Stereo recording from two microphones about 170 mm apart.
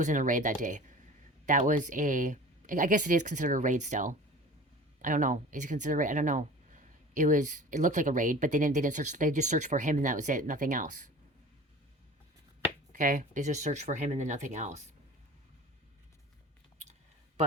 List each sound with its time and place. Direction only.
0.0 s speech: 50° right (ahead or behind)
12.9 s speech: 50° right (ahead or behind)